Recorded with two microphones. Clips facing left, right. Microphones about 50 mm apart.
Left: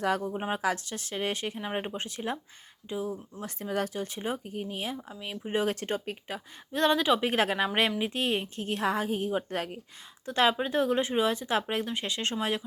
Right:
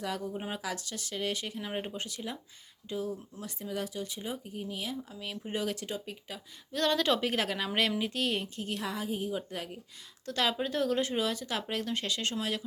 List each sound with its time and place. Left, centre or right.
0.0 s speech: left
0.3 s speech: left
2.9 s speech: left
3.4 s speech: left
5.2 s speech: left
6.7 s speech: left
10.2 s speech: left